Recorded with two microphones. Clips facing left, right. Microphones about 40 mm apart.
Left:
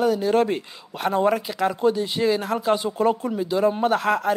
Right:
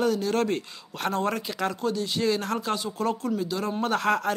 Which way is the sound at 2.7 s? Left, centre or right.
Left.